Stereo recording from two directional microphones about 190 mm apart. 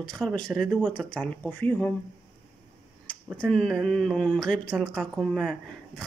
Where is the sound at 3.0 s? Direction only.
5° left (ahead or behind).